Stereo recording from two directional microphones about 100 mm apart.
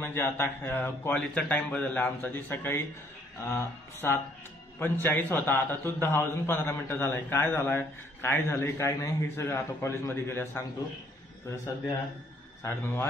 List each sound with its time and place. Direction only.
0.0 s a man's voice: 25° left (ahead or behind)
12.6 s a man's voice: 25° left (ahead or behind)